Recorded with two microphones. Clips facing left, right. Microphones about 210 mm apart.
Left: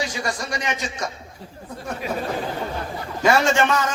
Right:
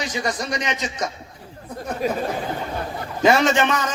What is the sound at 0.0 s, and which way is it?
A man's voice, 20° right (ahead or behind).